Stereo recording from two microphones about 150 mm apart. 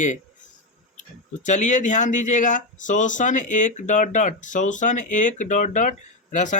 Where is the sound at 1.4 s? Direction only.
55° left (ahead or behind).